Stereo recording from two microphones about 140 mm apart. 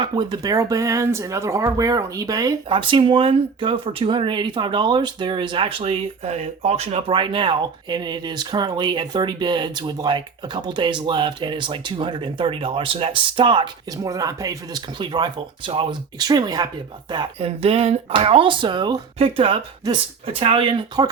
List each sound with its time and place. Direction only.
0.0 s speech: 35° right (ahead or behind)
2.6 s speech: 40° right (ahead or behind)
17.6 s speech: 45° right (ahead or behind)